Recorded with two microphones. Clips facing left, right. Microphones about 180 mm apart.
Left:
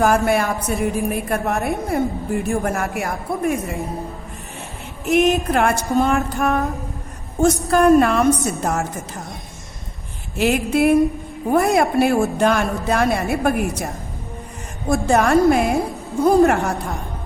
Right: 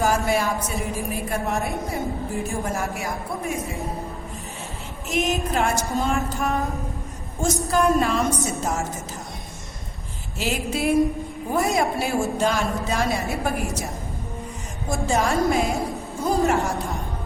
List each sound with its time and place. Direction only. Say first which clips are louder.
0.0 s a woman's voice: left 5 dB; 60° left (ahead or behind)
5.0 s a woman's voice: left 8 dB; 60° left (ahead or behind)
10.3 s a woman's voice: left 8 dB; 60° left (ahead or behind)